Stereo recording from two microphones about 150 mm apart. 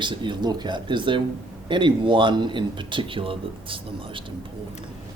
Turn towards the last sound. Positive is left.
turn(degrees=-35)  # may be behind; listen again after turning